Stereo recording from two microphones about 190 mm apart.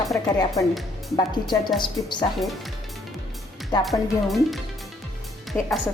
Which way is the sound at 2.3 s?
Centre (ahead or behind).